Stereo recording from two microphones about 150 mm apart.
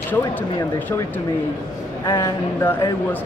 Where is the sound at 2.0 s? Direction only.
20° left (ahead or behind).